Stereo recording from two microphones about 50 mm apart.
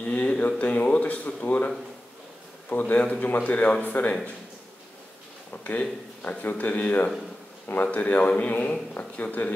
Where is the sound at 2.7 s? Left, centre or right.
Left.